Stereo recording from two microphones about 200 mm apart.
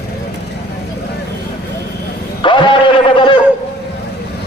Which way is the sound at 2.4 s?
25° left (ahead or behind).